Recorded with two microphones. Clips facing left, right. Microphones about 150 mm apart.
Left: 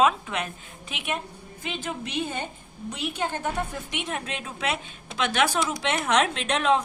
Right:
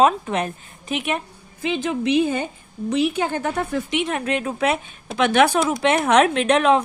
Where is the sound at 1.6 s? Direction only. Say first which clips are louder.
Right 11 dB; 90° right.